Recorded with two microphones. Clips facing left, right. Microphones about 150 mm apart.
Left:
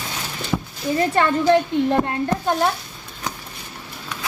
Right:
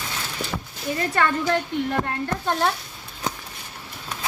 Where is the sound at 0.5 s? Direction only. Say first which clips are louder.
Left 11 dB; 10° left (ahead or behind).